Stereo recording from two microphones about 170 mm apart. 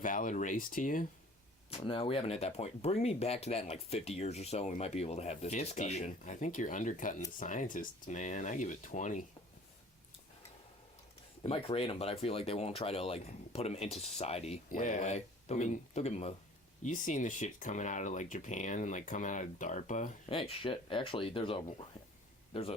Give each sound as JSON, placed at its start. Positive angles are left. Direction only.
{"t": 0.0, "sound": "speech", "side_deg": 50}
{"t": 1.7, "sound": "speech", "side_deg": 35}
{"t": 11.4, "sound": "speech", "side_deg": 35}